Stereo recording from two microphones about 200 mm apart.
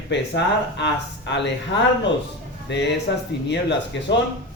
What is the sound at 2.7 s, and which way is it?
Speech, 60° left (ahead or behind).